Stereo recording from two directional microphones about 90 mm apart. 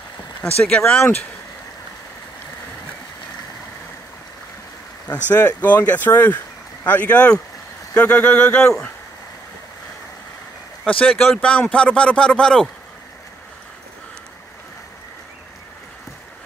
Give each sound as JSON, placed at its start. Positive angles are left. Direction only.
{"t": 0.7, "sound": "speech", "side_deg": 10}
{"t": 5.0, "sound": "speech", "side_deg": 20}
{"t": 10.9, "sound": "speech", "side_deg": 15}